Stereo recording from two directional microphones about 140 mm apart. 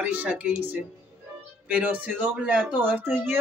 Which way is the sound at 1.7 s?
10° right (ahead or behind).